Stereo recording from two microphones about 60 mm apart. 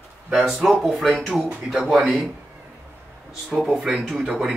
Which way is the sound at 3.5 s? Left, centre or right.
Centre.